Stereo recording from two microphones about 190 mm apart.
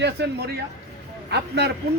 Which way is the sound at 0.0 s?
60° right (ahead or behind).